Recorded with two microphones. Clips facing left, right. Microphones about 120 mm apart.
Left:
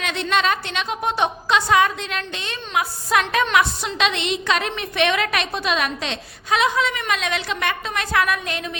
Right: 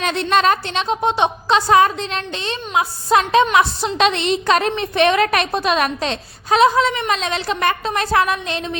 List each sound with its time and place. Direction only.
0.0 s a woman's voice: 40° right (ahead or behind); by 1.5 s 25° right (ahead or behind)
1.5 s a woman's voice: 35° right (ahead or behind)